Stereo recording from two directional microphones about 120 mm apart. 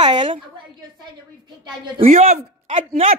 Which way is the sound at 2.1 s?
90° right.